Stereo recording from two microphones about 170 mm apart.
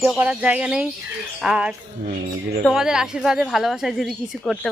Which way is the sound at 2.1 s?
65° right (ahead or behind).